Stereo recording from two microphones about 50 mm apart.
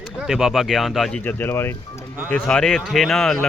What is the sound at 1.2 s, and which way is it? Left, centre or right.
Speech, left.